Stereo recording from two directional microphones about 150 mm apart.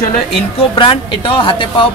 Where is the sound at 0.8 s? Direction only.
35° left (ahead or behind).